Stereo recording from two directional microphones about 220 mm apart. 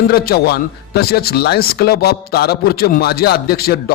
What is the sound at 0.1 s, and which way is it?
Speech, 45° left (ahead or behind).